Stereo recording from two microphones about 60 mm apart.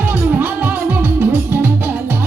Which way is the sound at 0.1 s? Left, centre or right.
Right.